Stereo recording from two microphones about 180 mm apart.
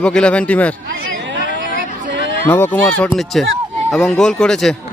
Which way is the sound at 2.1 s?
80° right.